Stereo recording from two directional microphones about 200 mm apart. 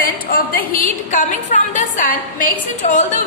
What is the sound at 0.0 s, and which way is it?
A woman's voice, 45° left (ahead or behind).